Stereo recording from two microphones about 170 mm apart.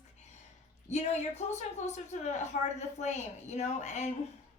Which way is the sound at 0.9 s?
40° left (ahead or behind).